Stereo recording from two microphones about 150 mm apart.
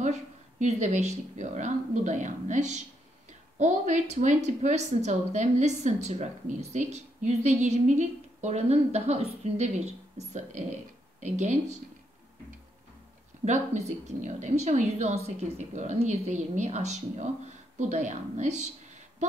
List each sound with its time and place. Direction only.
0.0 s a woman's voice: 50° right (ahead or behind)
13.5 s a woman's voice: 50° right (ahead or behind)